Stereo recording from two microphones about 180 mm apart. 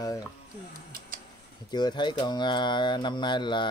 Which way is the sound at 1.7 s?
25° left (ahead or behind).